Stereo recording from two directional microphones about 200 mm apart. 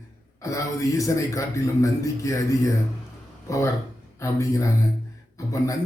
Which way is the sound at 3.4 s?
15° left (ahead or behind).